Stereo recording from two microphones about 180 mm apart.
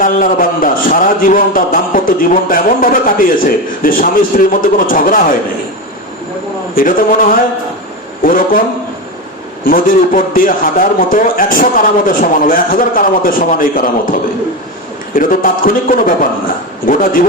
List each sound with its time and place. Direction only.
0.0 s a man's voice: 50° left (ahead or behind)
6.7 s a man's voice: 50° left (ahead or behind)
9.6 s a man's voice: 50° left (ahead or behind)